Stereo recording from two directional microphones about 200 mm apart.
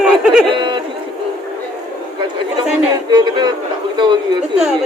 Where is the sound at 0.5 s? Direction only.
25° right (ahead or behind).